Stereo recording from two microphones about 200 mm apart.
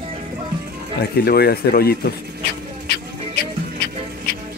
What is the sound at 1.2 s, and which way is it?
Speech, 50° left (ahead or behind).